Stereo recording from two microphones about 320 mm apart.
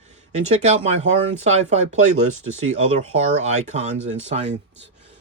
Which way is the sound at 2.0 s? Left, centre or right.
Right.